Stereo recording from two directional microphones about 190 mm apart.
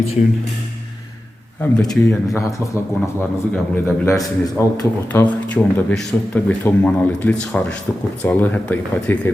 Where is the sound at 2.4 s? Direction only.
15° left (ahead or behind).